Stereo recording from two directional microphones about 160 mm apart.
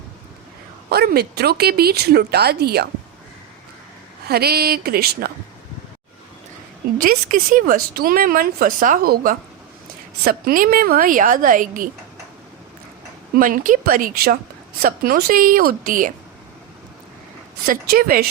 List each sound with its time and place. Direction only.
0.9 s speech: 80° right
4.3 s speech: 75° right (ahead or behind)
7.0 s a woman's voice: 60° right (ahead or behind)
13.3 s a woman's voice: 60° right (ahead or behind)
17.7 s a woman's voice: 65° right (ahead or behind)